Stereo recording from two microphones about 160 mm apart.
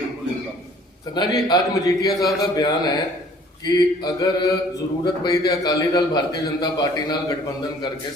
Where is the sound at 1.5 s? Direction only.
20° left (ahead or behind).